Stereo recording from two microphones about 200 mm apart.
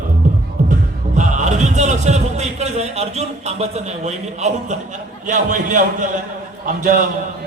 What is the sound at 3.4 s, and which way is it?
A man's voice, 35° right (ahead or behind).